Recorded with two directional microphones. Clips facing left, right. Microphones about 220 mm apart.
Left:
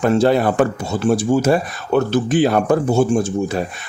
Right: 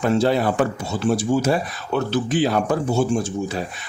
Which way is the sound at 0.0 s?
55° left (ahead or behind).